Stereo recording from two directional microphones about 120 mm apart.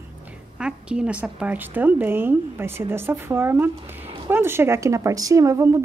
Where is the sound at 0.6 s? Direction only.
10° right (ahead or behind).